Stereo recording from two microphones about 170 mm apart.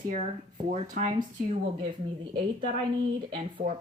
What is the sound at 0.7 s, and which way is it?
Speech, 55° right (ahead or behind).